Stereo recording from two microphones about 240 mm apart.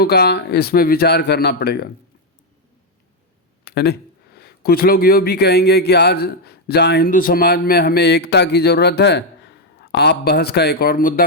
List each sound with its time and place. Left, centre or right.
0.0 s speech: left
3.6 s a sound: left
4.4 s speech: left